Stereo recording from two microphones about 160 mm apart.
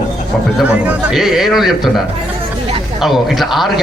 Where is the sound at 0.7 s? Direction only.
5° right (ahead or behind).